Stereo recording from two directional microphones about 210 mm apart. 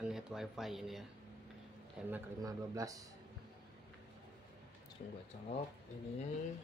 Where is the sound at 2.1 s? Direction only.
15° right (ahead or behind).